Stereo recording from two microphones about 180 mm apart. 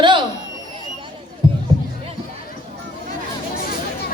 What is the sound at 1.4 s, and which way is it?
Music, 25° right (ahead or behind).